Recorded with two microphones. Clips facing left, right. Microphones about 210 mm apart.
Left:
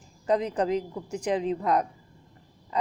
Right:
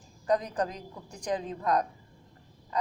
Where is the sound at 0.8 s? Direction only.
90° left.